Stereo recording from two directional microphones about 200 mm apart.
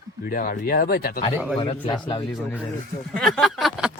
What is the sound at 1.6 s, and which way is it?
Speech, 25° left (ahead or behind).